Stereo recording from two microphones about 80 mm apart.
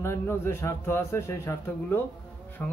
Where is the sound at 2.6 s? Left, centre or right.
Centre.